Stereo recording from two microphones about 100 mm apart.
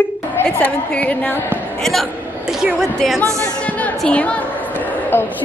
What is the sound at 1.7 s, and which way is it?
A man's voice, 5° left (ahead or behind).